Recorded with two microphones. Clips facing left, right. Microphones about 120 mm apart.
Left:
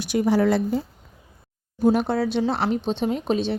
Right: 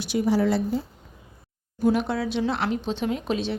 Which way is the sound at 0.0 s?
55° left (ahead or behind).